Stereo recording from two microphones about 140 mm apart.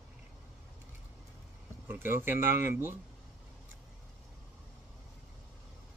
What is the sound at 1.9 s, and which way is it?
Speech, 15° right (ahead or behind).